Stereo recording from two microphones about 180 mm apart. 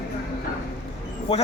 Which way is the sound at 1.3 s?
35° left (ahead or behind).